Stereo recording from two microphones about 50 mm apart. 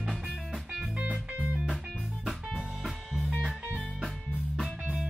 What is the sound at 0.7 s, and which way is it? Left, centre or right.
Music, centre.